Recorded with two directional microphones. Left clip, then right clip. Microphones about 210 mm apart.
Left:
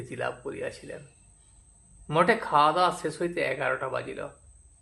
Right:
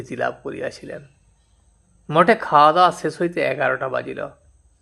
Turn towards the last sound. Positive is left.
turn(degrees=-25)  # may be behind; listen again after turning